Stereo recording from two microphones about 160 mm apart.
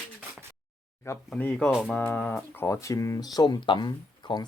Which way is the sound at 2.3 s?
15° left (ahead or behind).